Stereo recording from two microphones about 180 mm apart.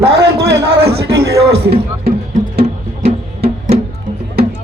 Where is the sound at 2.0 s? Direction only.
60° right (ahead or behind).